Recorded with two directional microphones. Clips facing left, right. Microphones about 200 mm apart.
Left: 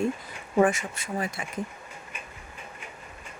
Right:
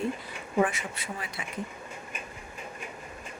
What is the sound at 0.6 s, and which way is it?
Speech, 45° left (ahead or behind).